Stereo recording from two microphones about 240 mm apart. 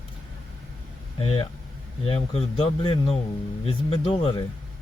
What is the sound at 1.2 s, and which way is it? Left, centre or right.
Speech, left.